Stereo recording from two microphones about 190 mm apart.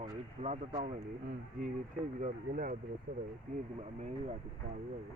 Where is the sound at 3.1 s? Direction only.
55° right (ahead or behind).